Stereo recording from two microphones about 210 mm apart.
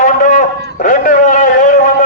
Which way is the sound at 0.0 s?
35° left (ahead or behind).